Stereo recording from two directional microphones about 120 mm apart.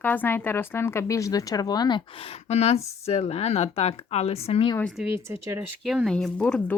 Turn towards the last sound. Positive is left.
turn(degrees=10)  # may be behind; listen again after turning